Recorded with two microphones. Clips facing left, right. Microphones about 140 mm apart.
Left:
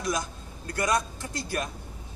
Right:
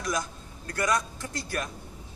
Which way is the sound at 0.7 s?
25° left (ahead or behind).